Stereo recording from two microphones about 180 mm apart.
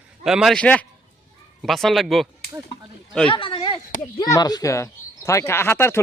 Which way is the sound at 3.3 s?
30° left (ahead or behind).